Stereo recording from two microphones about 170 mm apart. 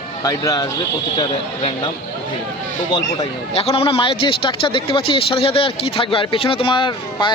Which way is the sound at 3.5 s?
35° left (ahead or behind).